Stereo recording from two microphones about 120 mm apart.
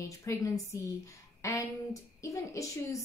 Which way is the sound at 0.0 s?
25° left (ahead or behind).